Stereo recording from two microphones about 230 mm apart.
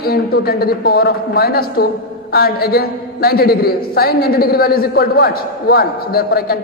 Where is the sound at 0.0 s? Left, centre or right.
Left.